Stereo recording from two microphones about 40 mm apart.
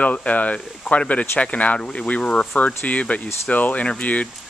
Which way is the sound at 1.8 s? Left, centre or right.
Left.